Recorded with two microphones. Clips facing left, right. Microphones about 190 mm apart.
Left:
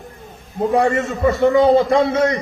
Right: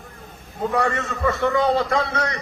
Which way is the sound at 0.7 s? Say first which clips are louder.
Left 6 dB; 25° left (ahead or behind).